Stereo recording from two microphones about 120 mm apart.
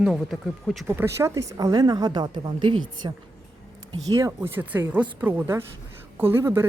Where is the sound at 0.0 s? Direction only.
5° right (ahead or behind).